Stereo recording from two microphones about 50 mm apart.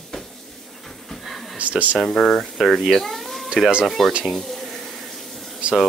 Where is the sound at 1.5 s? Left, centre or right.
Right.